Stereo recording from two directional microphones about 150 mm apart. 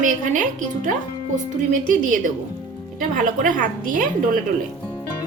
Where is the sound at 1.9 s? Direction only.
60° right (ahead or behind).